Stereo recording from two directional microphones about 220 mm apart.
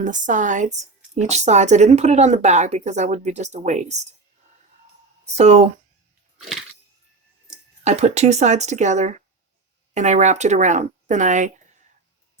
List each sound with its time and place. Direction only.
0.0 s a woman's voice: 35° right (ahead or behind)
5.2 s speech: 30° right (ahead or behind)
7.9 s a woman's voice: 30° right (ahead or behind)